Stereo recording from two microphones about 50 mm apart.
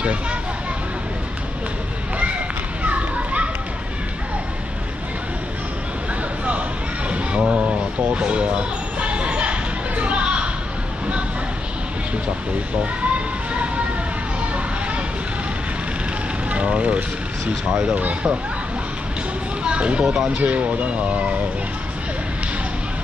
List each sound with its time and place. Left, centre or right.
0.0 s speech: right
2.8 s children playing: right
7.1 s a sound: right
8.1 s speech: right
9.0 s a sound: right
16.4 s speech: right
17.9 s speech: right
19.6 s speech: right